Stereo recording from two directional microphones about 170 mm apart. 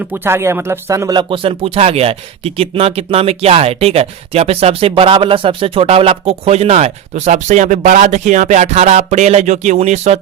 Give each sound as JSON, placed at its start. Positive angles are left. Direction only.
{"t": 0.1, "sound": "speech", "side_deg": -15}